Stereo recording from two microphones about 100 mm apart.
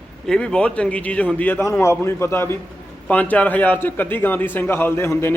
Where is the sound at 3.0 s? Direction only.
15° left (ahead or behind).